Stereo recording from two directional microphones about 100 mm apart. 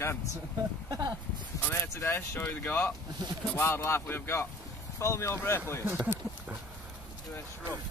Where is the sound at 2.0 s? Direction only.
25° left (ahead or behind).